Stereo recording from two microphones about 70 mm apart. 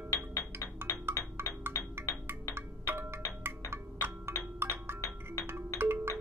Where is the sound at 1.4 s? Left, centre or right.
Right.